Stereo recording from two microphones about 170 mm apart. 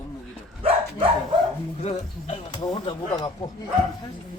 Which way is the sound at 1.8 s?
40° left (ahead or behind).